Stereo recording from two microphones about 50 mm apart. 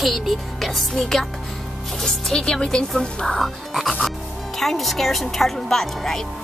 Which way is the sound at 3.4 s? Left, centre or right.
Centre.